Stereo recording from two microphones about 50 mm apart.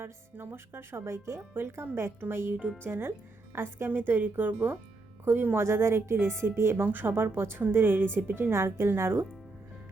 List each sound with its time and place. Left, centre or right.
0.0 s a woman's voice: right
1.5 s a woman's voice: right
3.8 s speech: right
5.5 s a woman's voice: right
6.8 s a woman's voice: right